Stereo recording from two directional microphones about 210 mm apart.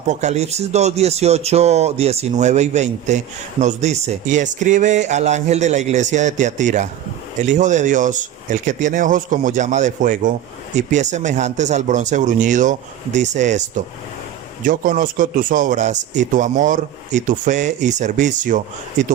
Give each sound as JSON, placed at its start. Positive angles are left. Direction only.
{"t": 0.1, "sound": "speech", "side_deg": -35}